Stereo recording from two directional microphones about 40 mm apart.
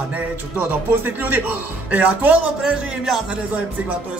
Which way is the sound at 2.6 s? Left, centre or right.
Centre.